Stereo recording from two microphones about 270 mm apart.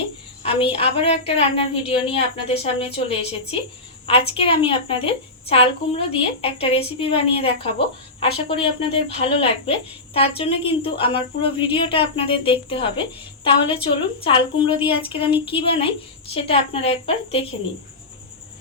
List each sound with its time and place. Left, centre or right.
0.4 s a woman's voice: left